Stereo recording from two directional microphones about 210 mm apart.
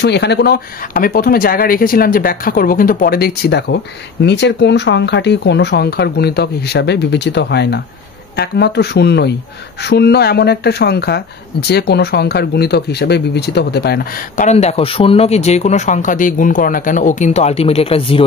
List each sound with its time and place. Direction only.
0.0 s speech: 50° left (ahead or behind); by 18.2 s 25° left (ahead or behind)